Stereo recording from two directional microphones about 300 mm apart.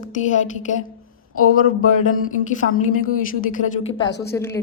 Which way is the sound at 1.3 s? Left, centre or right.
Left.